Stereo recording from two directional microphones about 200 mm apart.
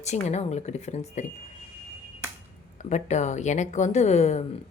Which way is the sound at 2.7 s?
35° left (ahead or behind).